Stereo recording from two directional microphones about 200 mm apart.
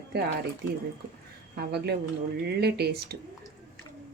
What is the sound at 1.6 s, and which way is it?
Speech, 55° right (ahead or behind).